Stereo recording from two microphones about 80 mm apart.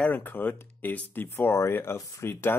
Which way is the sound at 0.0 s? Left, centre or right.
Left.